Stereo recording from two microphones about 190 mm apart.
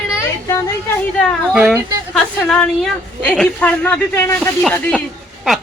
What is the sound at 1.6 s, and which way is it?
Speech, 10° right (ahead or behind).